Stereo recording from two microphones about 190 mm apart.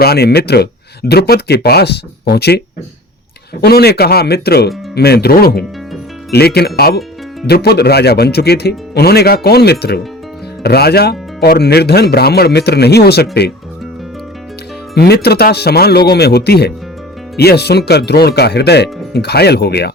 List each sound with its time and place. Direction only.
0.0 s speech: 55° left (ahead or behind)
3.6 s speech: 55° left (ahead or behind)
14.9 s speech: 55° left (ahead or behind)